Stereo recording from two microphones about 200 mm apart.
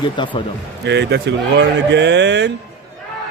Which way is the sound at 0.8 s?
60° right (ahead or behind).